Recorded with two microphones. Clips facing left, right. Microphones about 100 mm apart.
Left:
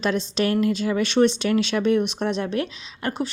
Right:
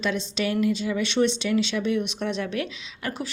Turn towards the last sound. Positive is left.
turn(degrees=30)  # may be behind; listen again after turning